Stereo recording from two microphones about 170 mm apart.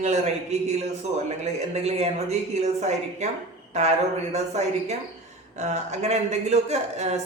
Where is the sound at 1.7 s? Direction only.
40° right (ahead or behind).